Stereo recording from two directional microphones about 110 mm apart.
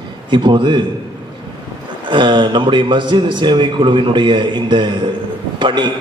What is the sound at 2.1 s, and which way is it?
A man's voice, 45° right (ahead or behind).